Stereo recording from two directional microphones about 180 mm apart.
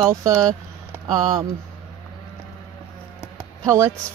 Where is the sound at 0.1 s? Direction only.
20° right (ahead or behind).